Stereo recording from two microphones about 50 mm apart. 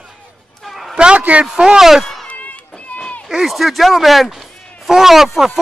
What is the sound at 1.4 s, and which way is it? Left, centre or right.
Speech, centre.